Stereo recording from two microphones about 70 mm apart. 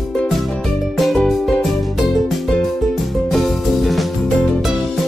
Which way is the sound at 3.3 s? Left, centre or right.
Centre.